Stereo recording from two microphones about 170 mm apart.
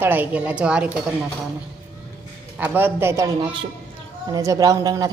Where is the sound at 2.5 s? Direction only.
10° right (ahead or behind).